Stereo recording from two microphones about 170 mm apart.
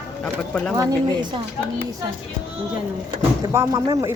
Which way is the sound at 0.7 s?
25° right (ahead or behind).